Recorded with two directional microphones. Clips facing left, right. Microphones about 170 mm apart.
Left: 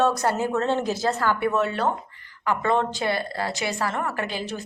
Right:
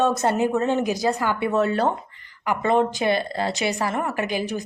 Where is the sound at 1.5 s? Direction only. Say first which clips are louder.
Right 3 dB; 35° right (ahead or behind).